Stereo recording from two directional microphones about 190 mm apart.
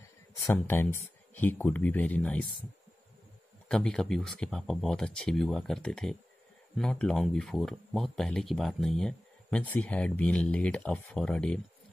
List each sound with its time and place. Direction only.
0.4 s speech: 15° left (ahead or behind)
3.6 s speech: 5° left (ahead or behind)